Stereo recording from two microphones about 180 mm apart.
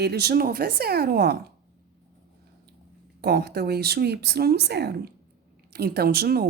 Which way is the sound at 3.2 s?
60° right (ahead or behind).